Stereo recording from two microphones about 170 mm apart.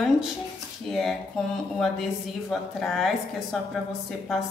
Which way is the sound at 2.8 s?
Centre (ahead or behind).